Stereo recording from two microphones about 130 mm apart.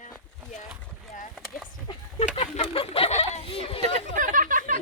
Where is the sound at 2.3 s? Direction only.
55° left (ahead or behind).